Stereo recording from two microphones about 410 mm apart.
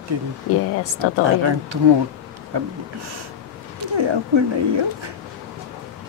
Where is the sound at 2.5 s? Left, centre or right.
Right.